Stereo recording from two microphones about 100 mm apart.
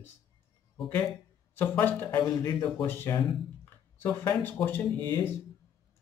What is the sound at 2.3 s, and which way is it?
Speech, 35° left (ahead or behind).